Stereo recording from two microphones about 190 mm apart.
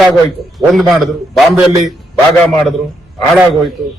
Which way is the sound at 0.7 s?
Centre (ahead or behind).